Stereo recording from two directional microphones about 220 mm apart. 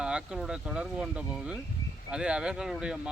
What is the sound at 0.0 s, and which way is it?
Speech, 5° right (ahead or behind).